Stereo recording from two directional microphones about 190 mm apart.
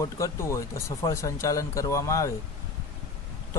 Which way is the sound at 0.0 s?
15° left (ahead or behind).